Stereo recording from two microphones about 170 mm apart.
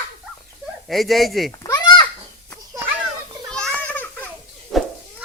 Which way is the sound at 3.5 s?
5° left (ahead or behind).